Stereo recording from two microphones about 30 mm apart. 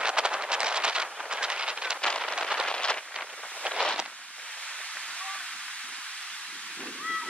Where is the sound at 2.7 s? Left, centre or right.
Left.